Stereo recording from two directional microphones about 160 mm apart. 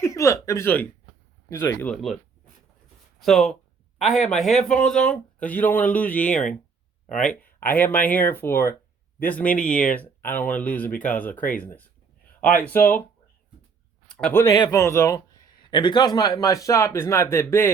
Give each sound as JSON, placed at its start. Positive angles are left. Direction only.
{"t": 0.0, "sound": "speech", "side_deg": 20}
{"t": 3.2, "sound": "speech", "side_deg": 0}
{"t": 14.1, "sound": "a man's voice", "side_deg": 5}
{"t": 14.5, "sound": "a man's voice", "side_deg": 25}